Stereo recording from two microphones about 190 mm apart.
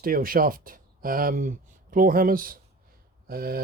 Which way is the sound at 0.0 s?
50° right (ahead or behind).